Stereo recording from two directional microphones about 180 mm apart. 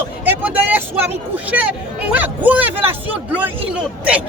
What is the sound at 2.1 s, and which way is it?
A man's voice, 10° right (ahead or behind).